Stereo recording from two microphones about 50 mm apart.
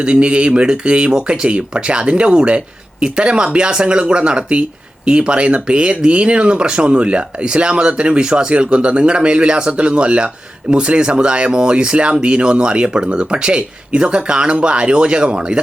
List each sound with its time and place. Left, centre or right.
0.0 s speech: right